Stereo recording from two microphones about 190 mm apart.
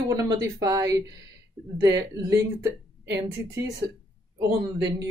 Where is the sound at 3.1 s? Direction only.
15° right (ahead or behind).